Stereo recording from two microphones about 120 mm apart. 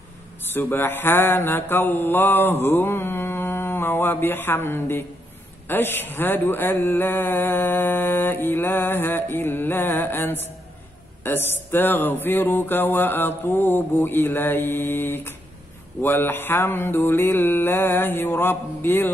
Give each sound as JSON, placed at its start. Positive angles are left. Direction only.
{"t": 0.5, "sound": "a man's voice", "side_deg": 15}